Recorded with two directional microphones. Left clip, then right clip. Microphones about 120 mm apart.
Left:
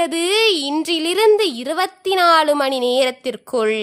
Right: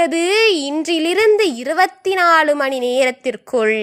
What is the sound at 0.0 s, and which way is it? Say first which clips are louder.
A woman's voice: right 2 dB; 10° right (ahead or behind).